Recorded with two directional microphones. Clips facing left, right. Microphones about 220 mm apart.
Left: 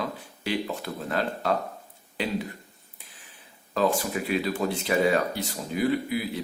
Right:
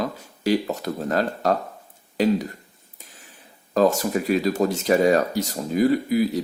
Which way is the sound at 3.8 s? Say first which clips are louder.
Right 6 dB; 40° right (ahead or behind).